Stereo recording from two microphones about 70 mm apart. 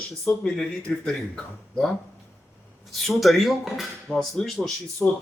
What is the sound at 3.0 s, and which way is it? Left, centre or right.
Speech, centre.